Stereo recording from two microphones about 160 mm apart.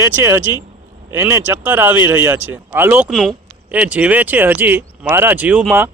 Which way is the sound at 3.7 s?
10° right (ahead or behind).